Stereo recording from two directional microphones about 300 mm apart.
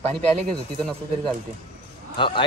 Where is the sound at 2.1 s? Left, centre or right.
Centre.